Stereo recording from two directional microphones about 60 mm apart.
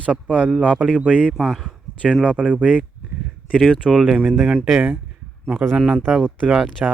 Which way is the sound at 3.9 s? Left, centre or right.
Right.